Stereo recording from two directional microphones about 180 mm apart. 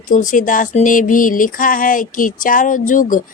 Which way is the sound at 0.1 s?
45° left (ahead or behind).